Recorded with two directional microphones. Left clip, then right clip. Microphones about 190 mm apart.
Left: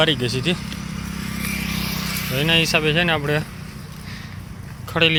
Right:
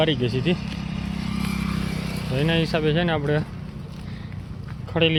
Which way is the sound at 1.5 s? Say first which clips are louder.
Left 4 dB; 65° right (ahead or behind).